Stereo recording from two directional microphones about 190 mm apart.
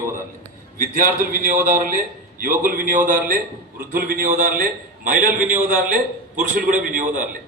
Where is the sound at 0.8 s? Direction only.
50° right (ahead or behind).